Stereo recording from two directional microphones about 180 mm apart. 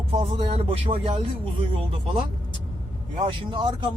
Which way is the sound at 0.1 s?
30° right (ahead or behind).